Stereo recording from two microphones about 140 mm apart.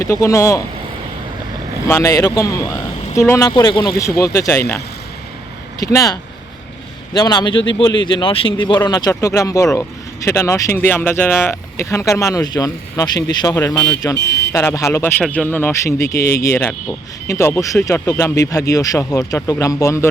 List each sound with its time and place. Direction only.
0.0 s speech: 20° left (ahead or behind)
1.9 s speech: 20° left (ahead or behind)
3.5 s speech: 35° left (ahead or behind)
5.8 s speech: 25° left (ahead or behind)